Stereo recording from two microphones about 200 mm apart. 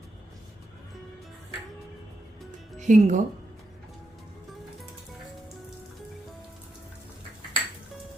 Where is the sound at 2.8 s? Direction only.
40° right (ahead or behind).